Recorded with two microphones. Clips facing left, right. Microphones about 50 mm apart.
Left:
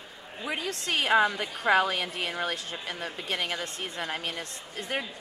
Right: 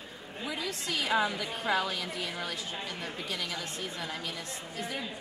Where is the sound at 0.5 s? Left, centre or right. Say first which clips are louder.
Left 4 dB; left.